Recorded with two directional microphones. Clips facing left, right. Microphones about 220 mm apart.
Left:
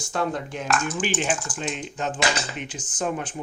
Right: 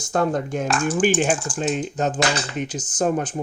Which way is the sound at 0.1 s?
45° right (ahead or behind).